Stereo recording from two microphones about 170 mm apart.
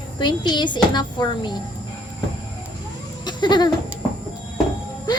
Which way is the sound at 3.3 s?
25° left (ahead or behind).